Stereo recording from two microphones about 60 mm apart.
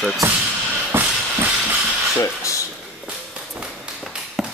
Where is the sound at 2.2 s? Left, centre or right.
Left.